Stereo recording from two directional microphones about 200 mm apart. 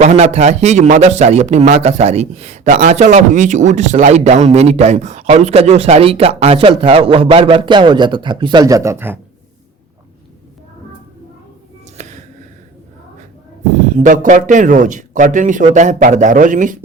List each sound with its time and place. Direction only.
0.0 s a man's voice: 35° right (ahead or behind); by 9.1 s 10° right (ahead or behind)
12.0 s a sound: 35° right (ahead or behind)
13.9 s a man's voice: 40° right (ahead or behind)